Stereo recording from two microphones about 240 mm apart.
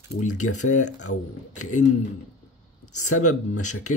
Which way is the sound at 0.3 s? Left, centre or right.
Left.